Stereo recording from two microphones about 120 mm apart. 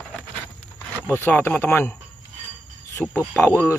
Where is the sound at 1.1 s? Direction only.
15° left (ahead or behind).